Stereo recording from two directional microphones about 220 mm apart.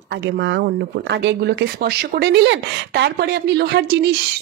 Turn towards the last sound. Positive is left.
turn(degrees=-50)  # may be behind; listen again after turning